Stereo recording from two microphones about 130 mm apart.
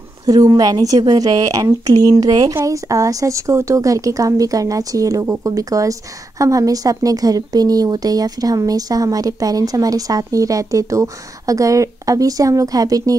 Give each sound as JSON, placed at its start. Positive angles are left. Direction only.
{"t": 0.3, "sound": "speech", "side_deg": -30}